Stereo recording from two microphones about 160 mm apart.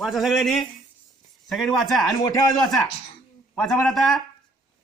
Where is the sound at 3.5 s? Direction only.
10° left (ahead or behind).